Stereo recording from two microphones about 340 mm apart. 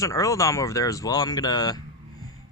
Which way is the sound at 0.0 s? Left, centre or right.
Centre.